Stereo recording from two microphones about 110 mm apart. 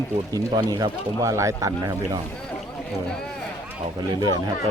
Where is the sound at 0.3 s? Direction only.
35° right (ahead or behind).